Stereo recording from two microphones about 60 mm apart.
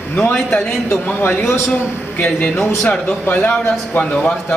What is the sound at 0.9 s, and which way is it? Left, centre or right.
Speech, left.